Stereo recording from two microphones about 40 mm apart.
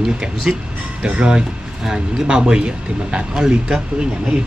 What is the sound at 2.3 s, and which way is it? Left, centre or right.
Speech, right.